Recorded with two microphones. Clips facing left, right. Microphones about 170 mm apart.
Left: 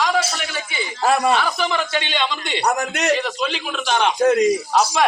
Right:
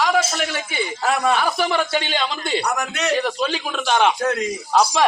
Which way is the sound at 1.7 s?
40° right (ahead or behind).